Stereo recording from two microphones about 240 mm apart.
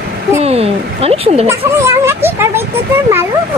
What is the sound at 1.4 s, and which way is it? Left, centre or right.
A child's voice, centre.